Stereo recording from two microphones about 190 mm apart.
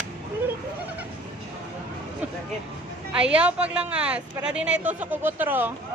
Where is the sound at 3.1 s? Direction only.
5° right (ahead or behind).